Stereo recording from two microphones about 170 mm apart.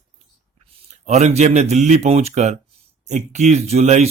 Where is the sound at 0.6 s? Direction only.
35° right (ahead or behind).